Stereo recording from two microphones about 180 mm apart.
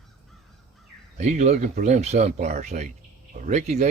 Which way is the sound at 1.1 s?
40° right (ahead or behind).